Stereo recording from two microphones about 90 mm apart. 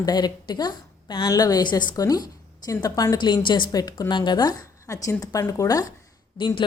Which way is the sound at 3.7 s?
45° left (ahead or behind).